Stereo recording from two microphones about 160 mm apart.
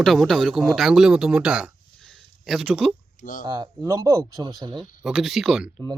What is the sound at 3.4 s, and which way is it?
A man's voice, 25° right (ahead or behind).